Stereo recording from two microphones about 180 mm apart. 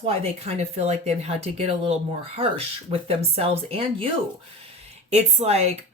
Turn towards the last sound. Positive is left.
turn(degrees=-40)  # may be behind; listen again after turning